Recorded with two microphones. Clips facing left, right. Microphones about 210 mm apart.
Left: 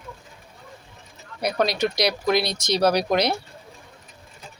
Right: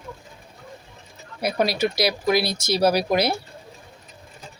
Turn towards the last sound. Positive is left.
turn(degrees=-5)  # may be behind; listen again after turning